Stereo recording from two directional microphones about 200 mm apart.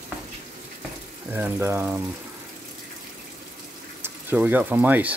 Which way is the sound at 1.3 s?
10° right (ahead or behind).